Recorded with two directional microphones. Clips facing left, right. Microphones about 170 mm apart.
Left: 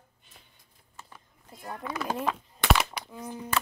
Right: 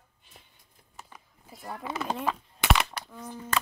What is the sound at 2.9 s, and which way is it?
Speech, 10° left (ahead or behind).